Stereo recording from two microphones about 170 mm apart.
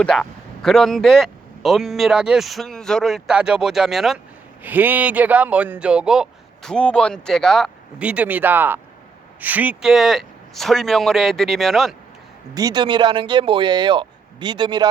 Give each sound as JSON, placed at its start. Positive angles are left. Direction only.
{"t": 0.0, "sound": "a man's voice", "side_deg": 5}
{"t": 12.5, "sound": "speech", "side_deg": -25}